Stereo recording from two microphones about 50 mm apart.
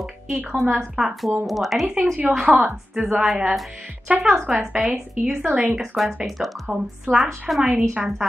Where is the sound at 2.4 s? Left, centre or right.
Right.